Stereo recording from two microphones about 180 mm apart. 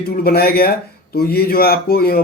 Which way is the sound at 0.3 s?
60° left (ahead or behind).